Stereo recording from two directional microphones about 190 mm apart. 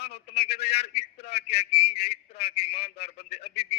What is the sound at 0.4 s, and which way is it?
A man's voice, 60° left (ahead or behind).